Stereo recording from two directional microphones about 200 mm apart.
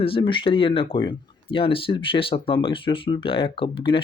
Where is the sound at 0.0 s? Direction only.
25° left (ahead or behind).